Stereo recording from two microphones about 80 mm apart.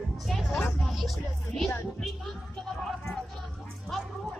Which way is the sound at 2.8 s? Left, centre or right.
Centre.